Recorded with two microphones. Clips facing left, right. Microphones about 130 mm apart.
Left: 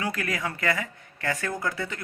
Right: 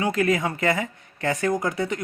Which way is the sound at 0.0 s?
20° right (ahead or behind).